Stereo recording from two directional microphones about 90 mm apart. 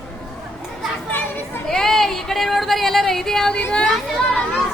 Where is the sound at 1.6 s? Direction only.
5° left (ahead or behind).